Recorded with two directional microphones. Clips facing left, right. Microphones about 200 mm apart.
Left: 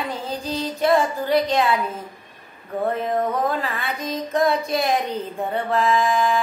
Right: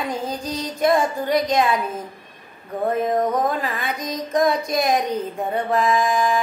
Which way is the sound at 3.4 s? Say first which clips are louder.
Right 1 dB; 15° right (ahead or behind).